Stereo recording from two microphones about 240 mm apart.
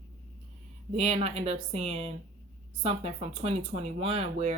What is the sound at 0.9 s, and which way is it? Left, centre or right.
Speech, right.